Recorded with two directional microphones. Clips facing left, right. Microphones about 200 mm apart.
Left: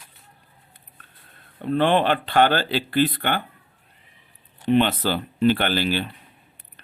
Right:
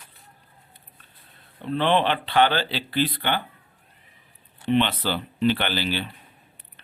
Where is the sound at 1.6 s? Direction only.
45° left (ahead or behind).